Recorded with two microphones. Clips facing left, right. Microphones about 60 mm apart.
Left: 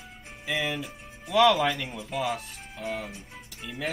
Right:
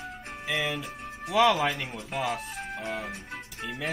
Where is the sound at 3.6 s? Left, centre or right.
Centre.